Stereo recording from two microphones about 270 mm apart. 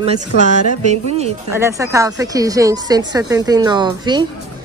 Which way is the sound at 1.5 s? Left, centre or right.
Centre.